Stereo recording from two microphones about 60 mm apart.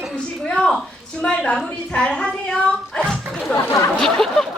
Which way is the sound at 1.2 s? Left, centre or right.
Centre.